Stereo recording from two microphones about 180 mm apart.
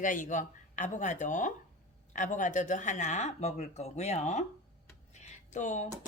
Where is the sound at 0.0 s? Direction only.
45° left (ahead or behind).